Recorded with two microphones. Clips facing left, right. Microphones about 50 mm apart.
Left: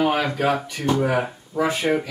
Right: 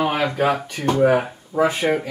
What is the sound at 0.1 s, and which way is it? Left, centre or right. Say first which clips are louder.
Speech: right 1 dB; right.